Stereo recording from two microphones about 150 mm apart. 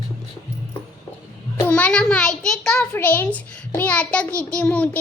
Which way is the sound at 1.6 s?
10° left (ahead or behind).